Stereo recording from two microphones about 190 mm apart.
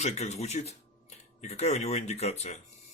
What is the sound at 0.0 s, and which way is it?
Speech, 35° left (ahead or behind).